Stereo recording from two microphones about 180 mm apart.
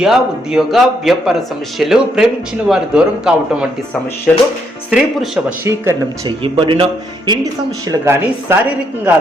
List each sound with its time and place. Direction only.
0.0 s a man's voice: centre (ahead or behind)
5.6 s speech: 15° right (ahead or behind)
6.4 s speech: 30° right (ahead or behind)
7.9 s speech: 15° right (ahead or behind)